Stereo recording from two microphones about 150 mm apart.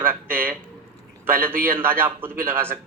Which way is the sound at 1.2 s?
15° right (ahead or behind).